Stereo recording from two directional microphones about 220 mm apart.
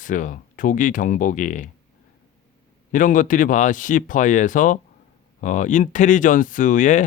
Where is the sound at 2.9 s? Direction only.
35° left (ahead or behind).